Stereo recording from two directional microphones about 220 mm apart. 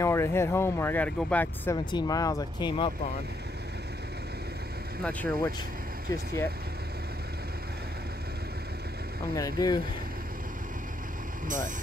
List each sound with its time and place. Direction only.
0.0 s speech: 10° left (ahead or behind)
1.9 s speech: 20° left (ahead or behind)
5.0 s speech: 10° left (ahead or behind)
9.3 s speech: 15° left (ahead or behind)
11.4 s speech: 35° right (ahead or behind)